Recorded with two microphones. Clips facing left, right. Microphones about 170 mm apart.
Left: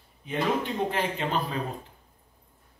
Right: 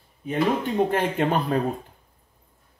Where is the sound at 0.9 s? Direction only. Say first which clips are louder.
Right 6 dB; 55° right (ahead or behind).